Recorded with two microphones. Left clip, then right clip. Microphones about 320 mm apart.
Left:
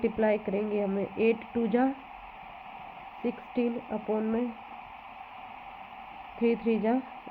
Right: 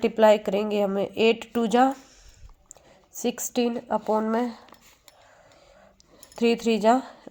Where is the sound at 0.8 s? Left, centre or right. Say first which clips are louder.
Right 6 dB; right.